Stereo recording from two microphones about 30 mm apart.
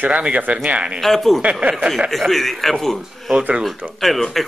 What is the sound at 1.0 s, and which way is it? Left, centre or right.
Speech, centre.